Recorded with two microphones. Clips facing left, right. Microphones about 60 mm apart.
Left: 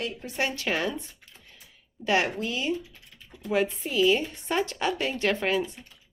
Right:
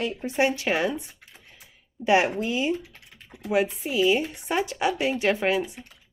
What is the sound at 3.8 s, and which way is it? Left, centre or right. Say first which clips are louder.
Speech: right 1 dB; centre.